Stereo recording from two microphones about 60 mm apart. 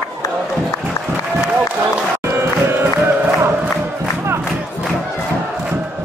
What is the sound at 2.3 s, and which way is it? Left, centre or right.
Crowd, right.